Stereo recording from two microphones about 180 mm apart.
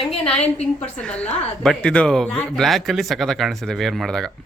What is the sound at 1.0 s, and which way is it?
A woman's voice, 5° left (ahead or behind).